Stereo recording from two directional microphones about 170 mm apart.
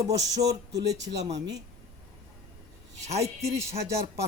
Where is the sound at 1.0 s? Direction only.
90° right.